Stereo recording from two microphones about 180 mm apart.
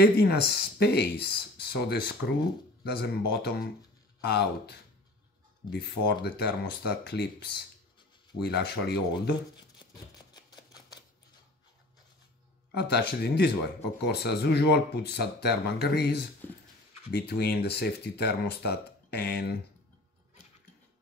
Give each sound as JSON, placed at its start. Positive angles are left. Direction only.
{"t": 0.0, "sound": "speech", "side_deg": 60}
{"t": 12.7, "sound": "speech", "side_deg": 65}